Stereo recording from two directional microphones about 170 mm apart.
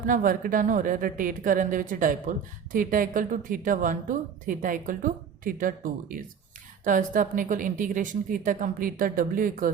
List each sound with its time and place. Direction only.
0.0 s a woman's voice: 55° right (ahead or behind)